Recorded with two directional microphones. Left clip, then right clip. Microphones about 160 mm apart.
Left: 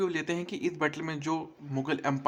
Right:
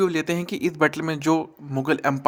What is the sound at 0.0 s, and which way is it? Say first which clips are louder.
A man's voice: right 8 dB; 35° right (ahead or behind).